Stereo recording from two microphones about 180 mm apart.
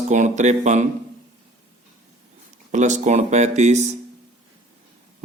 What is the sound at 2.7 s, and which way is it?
Speech, 40° right (ahead or behind).